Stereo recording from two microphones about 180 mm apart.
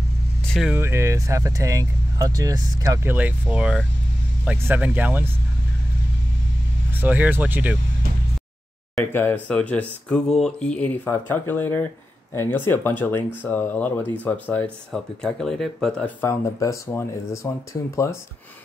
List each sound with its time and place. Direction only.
0.5 s speech: centre (ahead or behind)
0.7 s speech: 15° right (ahead or behind)
6.9 s speech: 10° right (ahead or behind)
9.1 s speech: 10° left (ahead or behind)